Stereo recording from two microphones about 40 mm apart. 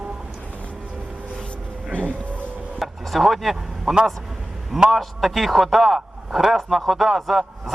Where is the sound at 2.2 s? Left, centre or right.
Left.